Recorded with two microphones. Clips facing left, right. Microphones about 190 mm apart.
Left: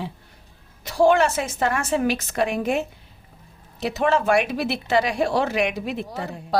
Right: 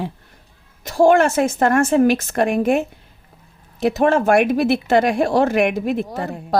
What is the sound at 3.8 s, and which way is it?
Speech, 50° right (ahead or behind).